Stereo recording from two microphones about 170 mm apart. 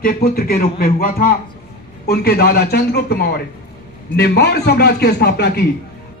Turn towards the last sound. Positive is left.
turn(degrees=70)  # may be behind; listen again after turning